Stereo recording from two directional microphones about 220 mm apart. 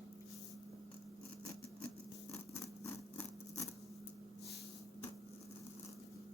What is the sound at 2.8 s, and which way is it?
Scissors, 10° left (ahead or behind).